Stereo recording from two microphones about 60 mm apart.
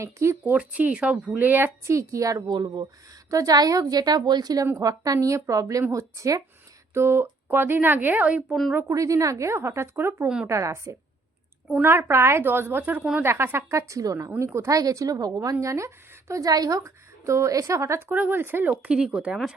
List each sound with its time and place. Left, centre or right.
0.0 s a woman's voice: right
0.6 s speech: right
1.9 s a woman's voice: right
6.9 s speech: right
8.9 s a woman's voice: right
11.7 s a woman's voice: right
12.4 s a woman's voice: right
14.3 s a woman's voice: right
14.7 s a woman's voice: right
15.6 s a woman's voice: right
16.3 s a woman's voice: right
18.1 s speech: right
18.7 s speech: right
18.9 s speech: centre